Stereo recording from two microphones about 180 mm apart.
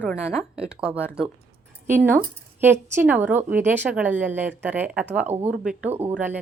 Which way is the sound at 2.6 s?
10° right (ahead or behind).